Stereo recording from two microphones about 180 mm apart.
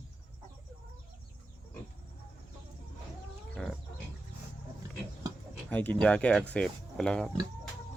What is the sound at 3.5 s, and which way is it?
Pig, centre (ahead or behind).